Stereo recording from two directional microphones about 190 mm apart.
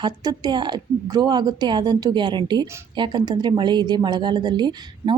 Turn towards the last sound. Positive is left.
turn(degrees=-20)  # may be behind; listen again after turning